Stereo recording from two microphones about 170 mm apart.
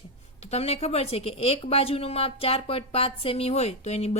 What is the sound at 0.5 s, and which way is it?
A woman's voice, 35° left (ahead or behind).